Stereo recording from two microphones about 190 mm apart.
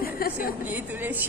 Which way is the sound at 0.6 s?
10° right (ahead or behind).